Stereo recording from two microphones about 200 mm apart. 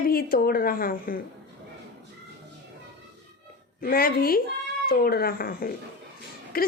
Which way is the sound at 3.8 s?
45° left (ahead or behind).